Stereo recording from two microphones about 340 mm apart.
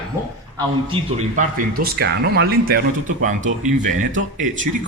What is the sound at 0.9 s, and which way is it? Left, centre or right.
Speech, right.